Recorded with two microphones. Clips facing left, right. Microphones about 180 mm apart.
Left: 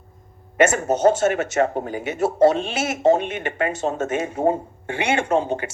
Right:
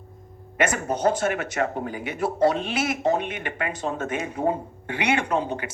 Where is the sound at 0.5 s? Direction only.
25° left (ahead or behind).